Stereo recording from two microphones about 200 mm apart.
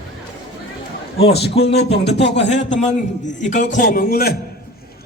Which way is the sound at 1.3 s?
55° left (ahead or behind).